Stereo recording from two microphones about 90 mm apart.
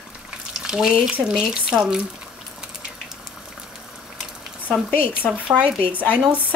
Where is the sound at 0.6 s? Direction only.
5° right (ahead or behind).